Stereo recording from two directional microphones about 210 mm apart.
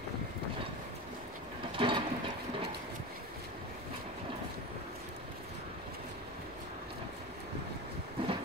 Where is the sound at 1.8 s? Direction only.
25° right (ahead or behind).